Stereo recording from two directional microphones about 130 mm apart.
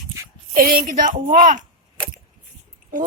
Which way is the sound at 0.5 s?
90° right.